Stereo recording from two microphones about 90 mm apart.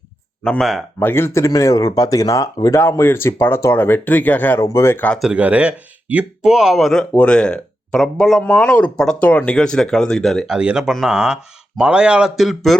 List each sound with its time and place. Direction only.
0.6 s speech: centre (ahead or behind)
0.9 s speech: 25° left (ahead or behind)
4.6 s speech: 30° left (ahead or behind)
5.2 s speech: 15° right (ahead or behind); by 8.4 s 5° left (ahead or behind)
8.4 s speech: 15° left (ahead or behind); by 12.7 s centre (ahead or behind)